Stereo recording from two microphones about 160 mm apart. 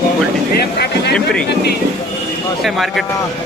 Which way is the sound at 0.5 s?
90° left.